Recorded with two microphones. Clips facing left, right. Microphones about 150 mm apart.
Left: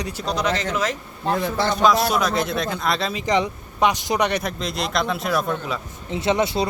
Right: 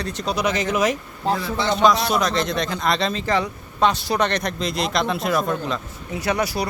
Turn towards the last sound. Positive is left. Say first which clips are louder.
# left 2 dB
turn(degrees=25)  # may be behind; listen again after turning